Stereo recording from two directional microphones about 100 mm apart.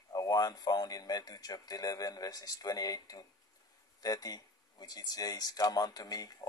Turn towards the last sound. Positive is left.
turn(degrees=40)  # may be behind; listen again after turning